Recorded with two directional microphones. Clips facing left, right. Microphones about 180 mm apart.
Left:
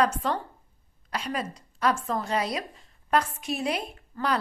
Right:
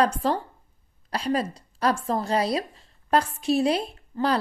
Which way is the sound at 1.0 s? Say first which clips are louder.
Right 6 dB; 35° right (ahead or behind).